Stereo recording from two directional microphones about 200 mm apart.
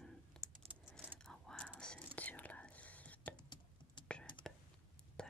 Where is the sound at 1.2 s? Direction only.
5° left (ahead or behind).